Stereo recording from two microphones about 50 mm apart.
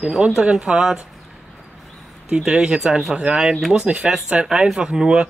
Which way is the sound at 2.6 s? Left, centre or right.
Centre.